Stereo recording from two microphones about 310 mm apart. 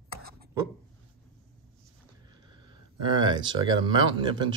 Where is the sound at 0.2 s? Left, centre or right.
Right.